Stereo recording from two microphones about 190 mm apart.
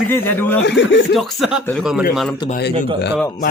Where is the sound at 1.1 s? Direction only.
Centre (ahead or behind).